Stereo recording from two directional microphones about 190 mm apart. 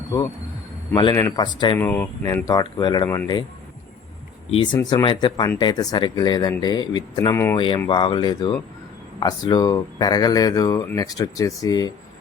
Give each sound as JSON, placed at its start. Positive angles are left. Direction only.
{"t": 0.9, "sound": "speech", "side_deg": 20}
{"t": 1.8, "sound": "speech", "side_deg": 10}
{"t": 4.5, "sound": "speech", "side_deg": 25}